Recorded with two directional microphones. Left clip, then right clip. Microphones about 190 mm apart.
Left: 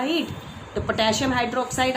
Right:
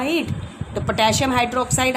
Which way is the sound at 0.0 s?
65° right (ahead or behind).